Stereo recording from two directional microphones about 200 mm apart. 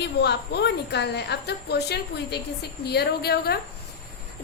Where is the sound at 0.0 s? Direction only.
55° left (ahead or behind).